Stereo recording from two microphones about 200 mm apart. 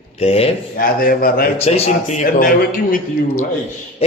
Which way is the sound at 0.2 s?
30° left (ahead or behind).